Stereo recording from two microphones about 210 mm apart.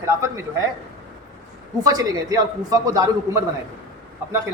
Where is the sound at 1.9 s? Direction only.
15° right (ahead or behind).